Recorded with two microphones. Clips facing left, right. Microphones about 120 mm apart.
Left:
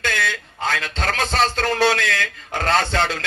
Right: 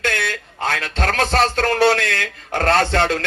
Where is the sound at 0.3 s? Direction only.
55° right (ahead or behind).